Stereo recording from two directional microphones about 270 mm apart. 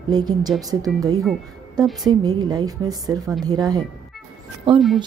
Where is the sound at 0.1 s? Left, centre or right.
Centre.